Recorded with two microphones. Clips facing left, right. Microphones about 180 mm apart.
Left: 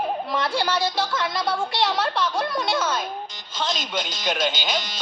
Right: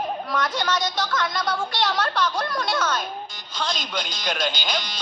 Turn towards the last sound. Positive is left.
turn(degrees=0)  # may be behind; listen again after turning